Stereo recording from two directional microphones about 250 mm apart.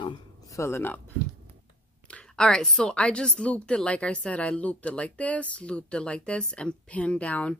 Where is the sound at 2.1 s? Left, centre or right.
Centre.